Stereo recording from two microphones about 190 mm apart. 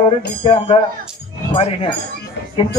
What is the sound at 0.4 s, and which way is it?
Speech, 25° left (ahead or behind).